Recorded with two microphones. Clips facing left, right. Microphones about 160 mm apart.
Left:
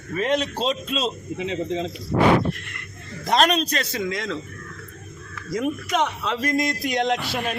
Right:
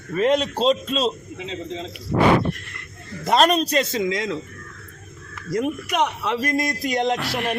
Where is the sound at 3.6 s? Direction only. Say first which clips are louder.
Right 5 dB; 20° right (ahead or behind).